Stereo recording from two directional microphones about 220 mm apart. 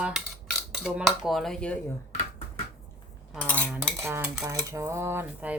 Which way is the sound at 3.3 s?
5° left (ahead or behind).